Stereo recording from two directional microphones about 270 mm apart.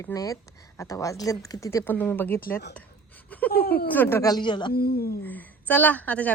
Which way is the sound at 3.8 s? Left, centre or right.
Centre.